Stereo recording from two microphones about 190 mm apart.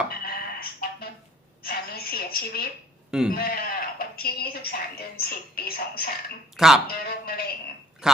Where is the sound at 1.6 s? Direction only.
55° left (ahead or behind).